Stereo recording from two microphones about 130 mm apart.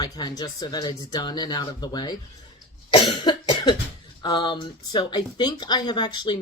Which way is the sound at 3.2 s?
35° left (ahead or behind).